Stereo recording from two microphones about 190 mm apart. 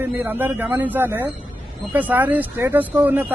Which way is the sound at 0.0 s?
10° right (ahead or behind).